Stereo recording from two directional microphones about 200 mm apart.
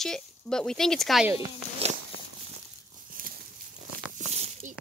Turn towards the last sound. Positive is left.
turn(degrees=-35)  # may be behind; listen again after turning